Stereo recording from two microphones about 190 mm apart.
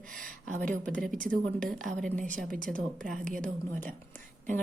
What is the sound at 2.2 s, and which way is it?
Speech, 45° right (ahead or behind).